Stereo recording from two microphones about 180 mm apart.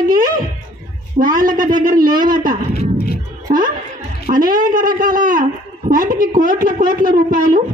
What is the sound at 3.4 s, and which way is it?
A man's voice, 50° right (ahead or behind).